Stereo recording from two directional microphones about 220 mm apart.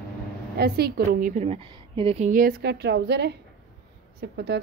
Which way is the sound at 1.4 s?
25° right (ahead or behind).